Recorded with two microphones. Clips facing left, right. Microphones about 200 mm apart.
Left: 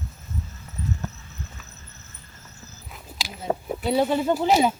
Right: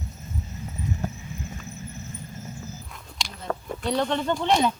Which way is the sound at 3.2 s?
5° left (ahead or behind).